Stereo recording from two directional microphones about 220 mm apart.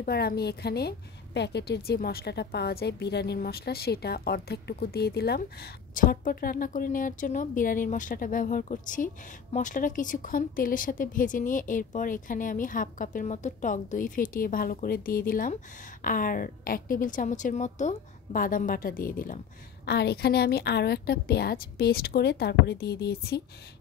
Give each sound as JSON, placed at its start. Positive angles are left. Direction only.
{"t": 0.0, "sound": "a woman's voice", "side_deg": 45}